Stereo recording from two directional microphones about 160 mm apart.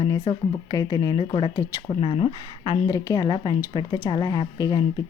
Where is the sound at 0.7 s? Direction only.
25° left (ahead or behind).